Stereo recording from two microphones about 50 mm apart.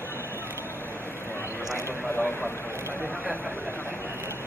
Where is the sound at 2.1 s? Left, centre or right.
Left.